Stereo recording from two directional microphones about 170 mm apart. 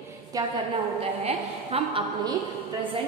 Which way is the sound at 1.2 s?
35° right (ahead or behind).